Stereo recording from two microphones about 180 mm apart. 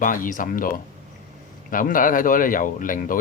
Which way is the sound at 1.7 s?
50° left (ahead or behind).